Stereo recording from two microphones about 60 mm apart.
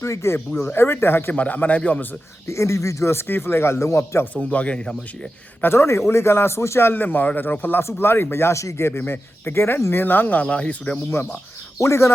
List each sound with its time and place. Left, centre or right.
0.0 s a man's voice: left
0.7 s speech: left
1.3 s speech: left
2.5 s a man's voice: left
4.4 s speech: left
5.6 s a man's voice: left
8.9 s speech: left
10.0 s speech: left
11.8 s a man's voice: left